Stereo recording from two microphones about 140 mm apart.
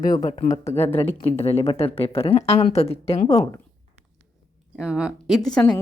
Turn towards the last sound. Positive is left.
turn(degrees=5)  # may be behind; listen again after turning